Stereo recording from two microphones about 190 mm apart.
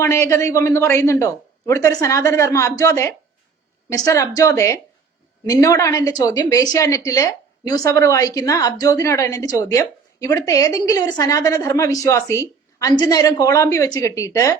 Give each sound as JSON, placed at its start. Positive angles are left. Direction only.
{"t": 0.0, "sound": "a woman's voice", "side_deg": 15}